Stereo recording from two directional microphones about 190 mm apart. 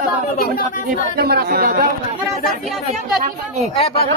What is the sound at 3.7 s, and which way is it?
Speech, 30° left (ahead or behind).